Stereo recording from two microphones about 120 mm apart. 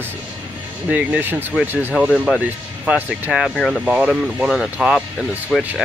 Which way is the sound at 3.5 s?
10° left (ahead or behind).